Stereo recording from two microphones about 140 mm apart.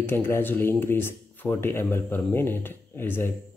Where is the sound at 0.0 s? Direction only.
15° left (ahead or behind).